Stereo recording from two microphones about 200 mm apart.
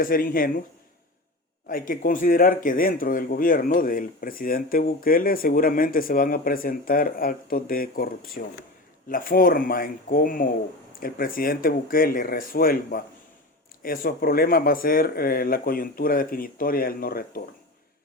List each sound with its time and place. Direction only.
0.0 s speech: 45° left (ahead or behind)
1.6 s speech: 45° left (ahead or behind)